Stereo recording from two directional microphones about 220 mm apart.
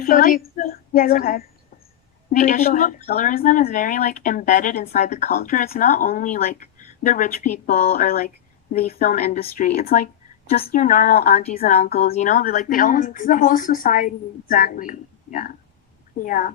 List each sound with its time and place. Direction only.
0.0 s speech: 40° left (ahead or behind)
11.4 s a woman's voice: 30° left (ahead or behind)